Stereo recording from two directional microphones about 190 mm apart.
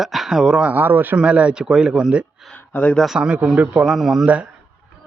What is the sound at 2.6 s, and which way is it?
Speech, 10° left (ahead or behind).